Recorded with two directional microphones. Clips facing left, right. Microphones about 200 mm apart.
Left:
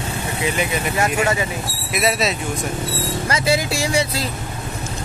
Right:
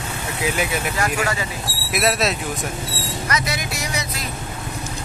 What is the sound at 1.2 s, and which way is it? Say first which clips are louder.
Speech: left 4 dB; 25° left (ahead or behind).